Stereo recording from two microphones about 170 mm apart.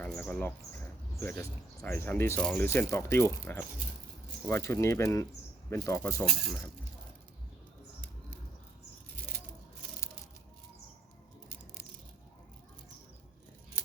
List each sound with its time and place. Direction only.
0.0 s speech: 5° left (ahead or behind)